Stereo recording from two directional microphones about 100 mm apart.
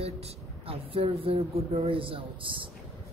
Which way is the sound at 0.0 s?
85° right.